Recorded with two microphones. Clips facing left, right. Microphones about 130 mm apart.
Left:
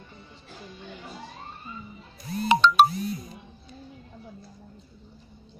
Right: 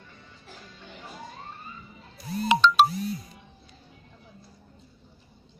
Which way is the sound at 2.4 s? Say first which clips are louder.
Left 1 dB; 45° left (ahead or behind).